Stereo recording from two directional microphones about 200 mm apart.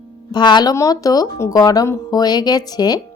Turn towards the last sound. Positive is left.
turn(degrees=20)  # may be behind; listen again after turning